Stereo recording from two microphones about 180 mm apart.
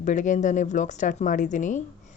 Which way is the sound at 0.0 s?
45° left (ahead or behind).